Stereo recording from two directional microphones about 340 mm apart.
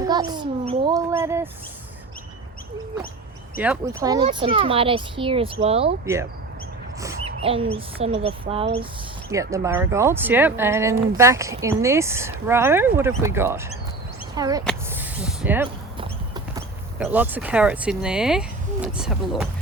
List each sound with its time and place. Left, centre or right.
0.0 s speech: centre
3.6 s speech: centre